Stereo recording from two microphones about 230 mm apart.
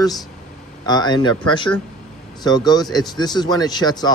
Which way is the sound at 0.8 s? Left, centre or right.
Centre.